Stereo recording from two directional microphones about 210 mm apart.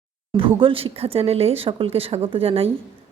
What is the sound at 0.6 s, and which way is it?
A woman's voice, 25° right (ahead or behind).